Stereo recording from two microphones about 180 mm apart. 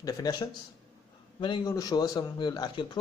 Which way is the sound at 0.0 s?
20° left (ahead or behind).